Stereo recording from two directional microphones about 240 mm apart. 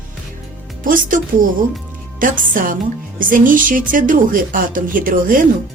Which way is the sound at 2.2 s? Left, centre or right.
Right.